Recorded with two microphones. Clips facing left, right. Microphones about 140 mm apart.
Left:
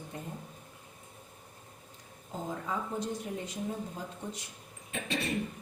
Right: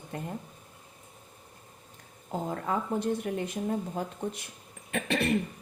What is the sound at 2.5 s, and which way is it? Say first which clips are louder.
Speech: right 5 dB; 60° right (ahead or behind).